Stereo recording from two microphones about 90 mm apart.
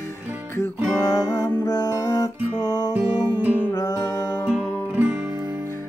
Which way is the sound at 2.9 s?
15° right (ahead or behind).